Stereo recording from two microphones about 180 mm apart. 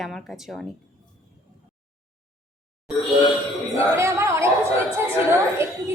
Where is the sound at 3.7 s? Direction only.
15° right (ahead or behind).